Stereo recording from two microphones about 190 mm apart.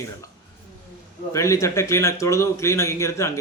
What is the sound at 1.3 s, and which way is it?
A man's voice, 15° left (ahead or behind).